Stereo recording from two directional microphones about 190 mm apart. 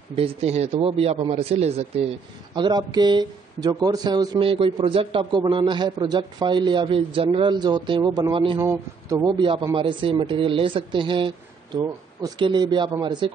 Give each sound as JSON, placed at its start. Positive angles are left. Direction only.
{"t": 0.1, "sound": "a man's voice", "side_deg": -30}
{"t": 2.5, "sound": "speech", "side_deg": -20}
{"t": 8.5, "sound": "speech", "side_deg": -15}
{"t": 9.4, "sound": "speech", "side_deg": -25}